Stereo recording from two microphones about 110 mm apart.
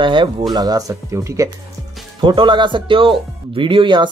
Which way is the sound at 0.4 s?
35° right (ahead or behind).